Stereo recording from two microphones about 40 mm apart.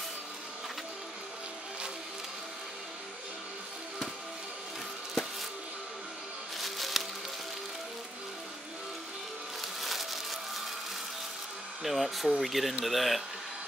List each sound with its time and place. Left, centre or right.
6.6 s music: centre
9.6 s music: centre
11.8 s speech: centre